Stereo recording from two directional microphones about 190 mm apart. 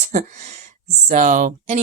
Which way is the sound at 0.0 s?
40° right (ahead or behind).